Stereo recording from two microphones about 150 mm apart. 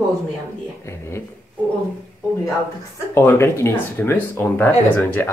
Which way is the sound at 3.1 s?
15° left (ahead or behind).